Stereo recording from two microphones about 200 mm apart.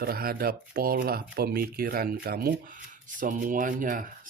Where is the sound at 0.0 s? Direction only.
50° right (ahead or behind).